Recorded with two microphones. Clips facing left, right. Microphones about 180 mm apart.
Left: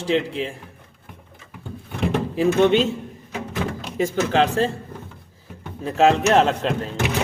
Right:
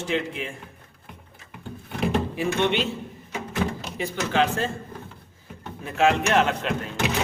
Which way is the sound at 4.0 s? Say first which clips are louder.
Left 5 dB; 40° left (ahead or behind).